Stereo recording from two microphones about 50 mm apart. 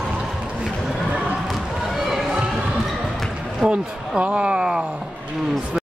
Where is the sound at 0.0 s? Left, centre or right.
Centre.